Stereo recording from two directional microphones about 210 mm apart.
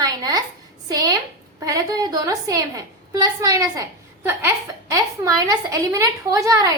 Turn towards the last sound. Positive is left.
turn(degrees=-15)  # may be behind; listen again after turning